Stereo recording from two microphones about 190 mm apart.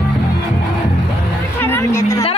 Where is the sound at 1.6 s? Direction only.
15° left (ahead or behind).